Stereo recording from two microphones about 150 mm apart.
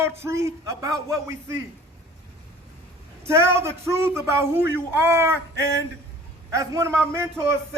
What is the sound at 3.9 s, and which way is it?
Speech, 15° right (ahead or behind).